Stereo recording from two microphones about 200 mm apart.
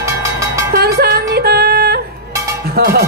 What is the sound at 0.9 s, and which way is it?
Music, 55° right (ahead or behind).